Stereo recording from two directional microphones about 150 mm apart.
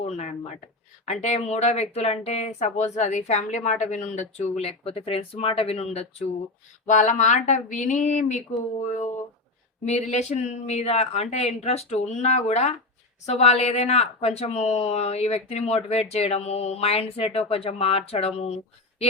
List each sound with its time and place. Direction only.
0.0 s speech: 50° left (ahead or behind)
9.8 s speech: 50° left (ahead or behind)